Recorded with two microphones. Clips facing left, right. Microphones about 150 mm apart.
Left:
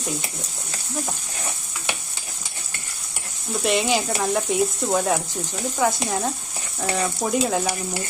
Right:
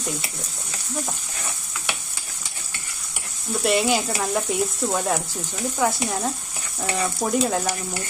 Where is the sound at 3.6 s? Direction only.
Centre (ahead or behind).